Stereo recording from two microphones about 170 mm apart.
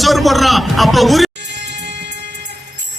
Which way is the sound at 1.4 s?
90° right.